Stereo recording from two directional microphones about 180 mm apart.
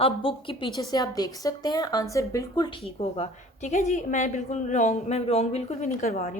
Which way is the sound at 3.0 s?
40° left (ahead or behind).